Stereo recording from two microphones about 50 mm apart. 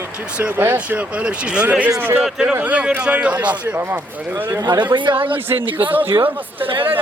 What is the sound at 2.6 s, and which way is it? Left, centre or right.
Speech, right.